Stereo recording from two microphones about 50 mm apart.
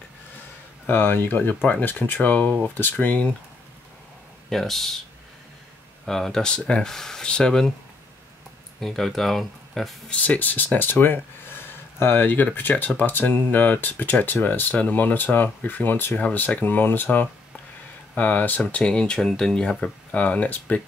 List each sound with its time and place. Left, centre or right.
0.8 s speech: left
4.5 s speech: centre
6.0 s speech: centre
6.5 s speech: centre
8.7 s speech: centre
10.0 s speech: left
18.6 s speech: left
20.2 s speech: left